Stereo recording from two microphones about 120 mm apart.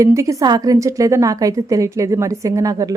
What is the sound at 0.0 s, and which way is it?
A woman's voice, 25° right (ahead or behind).